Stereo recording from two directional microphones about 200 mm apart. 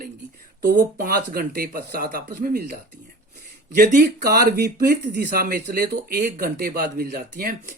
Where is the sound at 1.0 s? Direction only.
50° right (ahead or behind).